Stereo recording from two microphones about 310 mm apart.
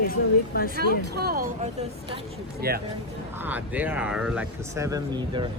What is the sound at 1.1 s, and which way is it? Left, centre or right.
A man's voice, right.